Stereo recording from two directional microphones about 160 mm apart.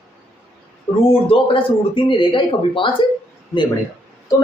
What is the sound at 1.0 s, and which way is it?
A man's voice, 35° left (ahead or behind).